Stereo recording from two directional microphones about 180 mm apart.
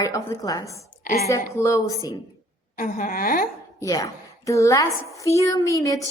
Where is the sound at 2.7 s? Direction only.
50° left (ahead or behind).